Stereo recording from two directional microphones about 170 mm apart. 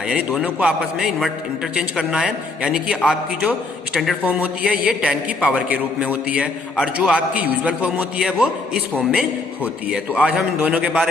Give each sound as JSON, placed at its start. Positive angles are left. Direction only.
{"t": 0.1, "sound": "a man's voice", "side_deg": -5}
{"t": 9.9, "sound": "a man's voice", "side_deg": -5}